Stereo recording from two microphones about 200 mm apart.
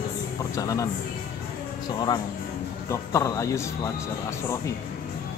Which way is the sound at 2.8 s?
15° left (ahead or behind).